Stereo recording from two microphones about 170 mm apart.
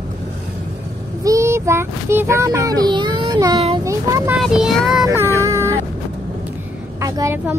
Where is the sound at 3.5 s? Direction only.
35° right (ahead or behind).